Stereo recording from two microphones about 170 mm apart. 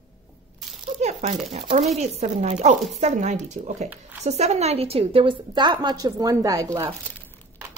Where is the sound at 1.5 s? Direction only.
40° right (ahead or behind); by 6.8 s 20° right (ahead or behind).